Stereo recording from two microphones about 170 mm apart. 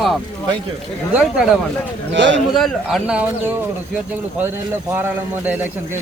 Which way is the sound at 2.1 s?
90° right.